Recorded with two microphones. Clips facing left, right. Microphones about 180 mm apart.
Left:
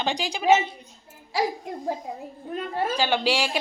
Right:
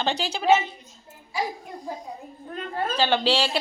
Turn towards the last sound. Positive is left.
turn(degrees=10)  # may be behind; listen again after turning